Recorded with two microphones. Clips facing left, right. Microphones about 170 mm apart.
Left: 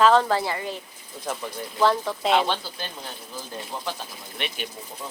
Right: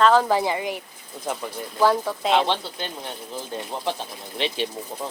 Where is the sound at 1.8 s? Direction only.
5° right (ahead or behind).